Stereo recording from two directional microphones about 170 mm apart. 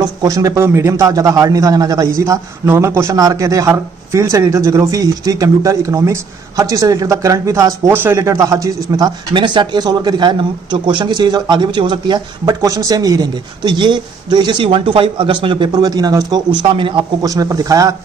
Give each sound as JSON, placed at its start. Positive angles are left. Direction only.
{"t": 0.2, "sound": "a man's voice", "side_deg": -20}